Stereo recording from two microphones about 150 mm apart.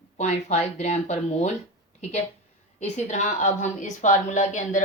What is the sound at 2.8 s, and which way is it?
A woman's voice, 50° left (ahead or behind).